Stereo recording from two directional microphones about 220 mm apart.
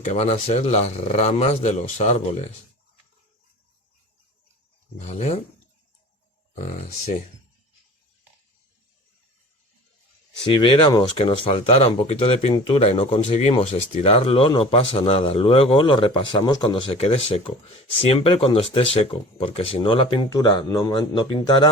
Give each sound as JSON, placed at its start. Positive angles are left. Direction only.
{"t": 0.0, "sound": "speech", "side_deg": 30}
{"t": 4.9, "sound": "speech", "side_deg": 30}
{"t": 6.6, "sound": "speech", "side_deg": 30}
{"t": 10.4, "sound": "speech", "side_deg": 20}